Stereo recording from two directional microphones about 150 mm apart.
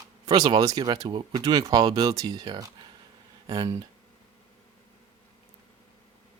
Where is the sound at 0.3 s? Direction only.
30° right (ahead or behind).